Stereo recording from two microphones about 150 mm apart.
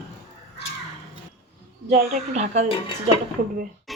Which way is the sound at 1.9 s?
55° right (ahead or behind).